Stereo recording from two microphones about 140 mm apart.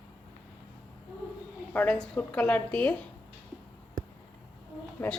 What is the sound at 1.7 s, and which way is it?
A woman's voice, 10° left (ahead or behind).